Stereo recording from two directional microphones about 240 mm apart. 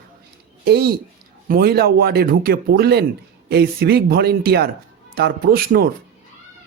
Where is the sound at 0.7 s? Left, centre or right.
Right.